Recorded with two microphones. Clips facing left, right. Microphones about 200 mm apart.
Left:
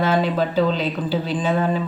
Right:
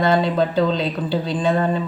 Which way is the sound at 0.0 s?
5° left (ahead or behind).